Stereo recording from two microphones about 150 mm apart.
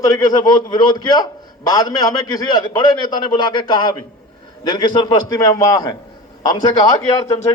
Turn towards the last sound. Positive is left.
turn(degrees=25)  # may be behind; listen again after turning